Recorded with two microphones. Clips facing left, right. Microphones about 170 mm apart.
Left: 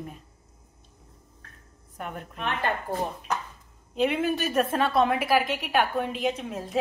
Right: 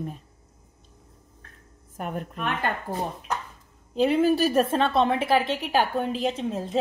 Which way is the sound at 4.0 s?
35° right (ahead or behind).